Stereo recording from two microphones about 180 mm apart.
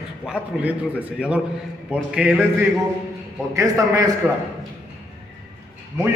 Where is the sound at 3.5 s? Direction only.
15° right (ahead or behind).